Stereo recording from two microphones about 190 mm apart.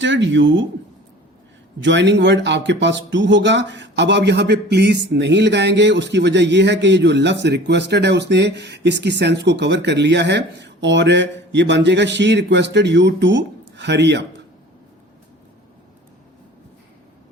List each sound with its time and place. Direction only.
0.0 s speech: 70° right (ahead or behind)
1.8 s speech: 70° right (ahead or behind)